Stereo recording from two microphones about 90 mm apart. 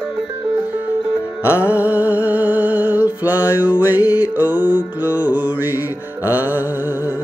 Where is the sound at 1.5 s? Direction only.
20° right (ahead or behind).